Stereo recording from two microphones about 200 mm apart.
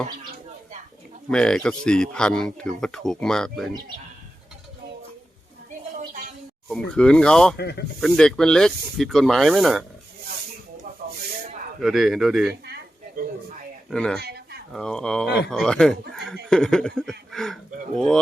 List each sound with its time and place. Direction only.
1.3 s speech: 5° left (ahead or behind)
6.7 s speech: 5° left (ahead or behind)
7.5 s speech: 55° left (ahead or behind)
8.0 s speech: 5° left (ahead or behind)
11.8 s speech: centre (ahead or behind)
12.6 s a sound: 55° right (ahead or behind)
13.9 s speech: 5° left (ahead or behind)
14.2 s a sound: 50° right (ahead or behind)
14.7 s speech: 5° left (ahead or behind)